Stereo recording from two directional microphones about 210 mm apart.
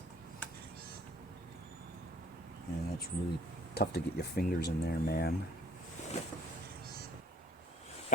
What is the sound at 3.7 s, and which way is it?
Speech, 50° left (ahead or behind).